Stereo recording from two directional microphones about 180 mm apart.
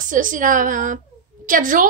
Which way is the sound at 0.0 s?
45° right (ahead or behind).